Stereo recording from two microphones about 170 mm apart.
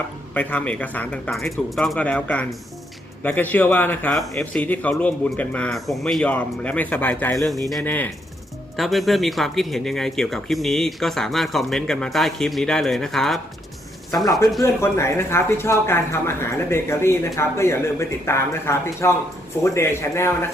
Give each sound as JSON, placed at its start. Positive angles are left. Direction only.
{"t": 0.3, "sound": "a man's voice", "side_deg": 10}
{"t": 14.6, "sound": "a man's voice", "side_deg": 15}